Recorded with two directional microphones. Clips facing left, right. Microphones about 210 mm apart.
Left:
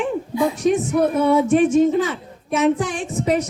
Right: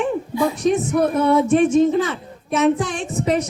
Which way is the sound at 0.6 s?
10° left (ahead or behind).